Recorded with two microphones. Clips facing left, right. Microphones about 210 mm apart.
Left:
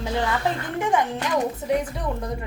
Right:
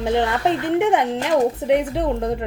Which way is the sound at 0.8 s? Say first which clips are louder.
Right 5 dB; 65° right (ahead or behind).